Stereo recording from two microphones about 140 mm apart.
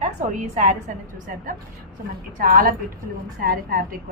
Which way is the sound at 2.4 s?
85° right.